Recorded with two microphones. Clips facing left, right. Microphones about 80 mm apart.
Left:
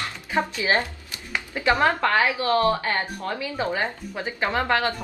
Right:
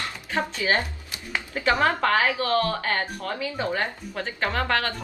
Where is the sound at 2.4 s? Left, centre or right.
Left.